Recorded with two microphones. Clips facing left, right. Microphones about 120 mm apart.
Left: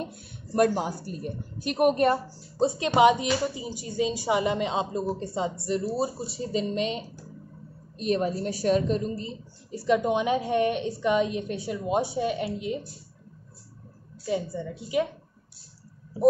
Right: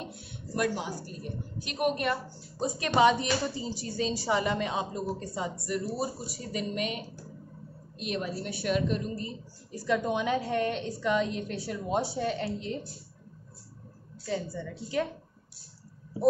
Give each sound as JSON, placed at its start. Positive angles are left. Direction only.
{"t": 0.0, "sound": "a woman's voice", "side_deg": 45}
{"t": 2.8, "sound": "a woman's voice", "side_deg": 20}
{"t": 8.0, "sound": "a woman's voice", "side_deg": 40}
{"t": 14.2, "sound": "a woman's voice", "side_deg": 15}